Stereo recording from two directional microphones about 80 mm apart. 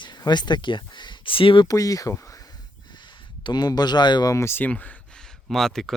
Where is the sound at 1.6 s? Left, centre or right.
Left.